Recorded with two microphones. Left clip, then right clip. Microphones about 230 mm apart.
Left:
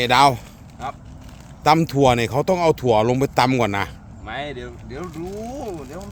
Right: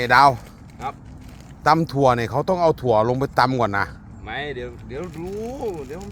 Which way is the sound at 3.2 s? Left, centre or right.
Left.